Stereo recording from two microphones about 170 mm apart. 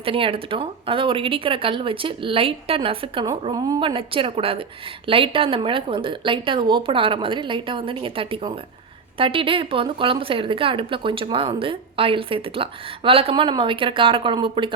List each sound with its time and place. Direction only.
0.0 s a woman's voice: 30° right (ahead or behind)